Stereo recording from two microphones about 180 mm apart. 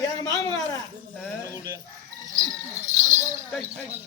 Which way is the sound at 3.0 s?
45° right (ahead or behind).